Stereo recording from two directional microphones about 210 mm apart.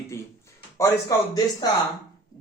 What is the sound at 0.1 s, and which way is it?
A man's voice, 15° left (ahead or behind).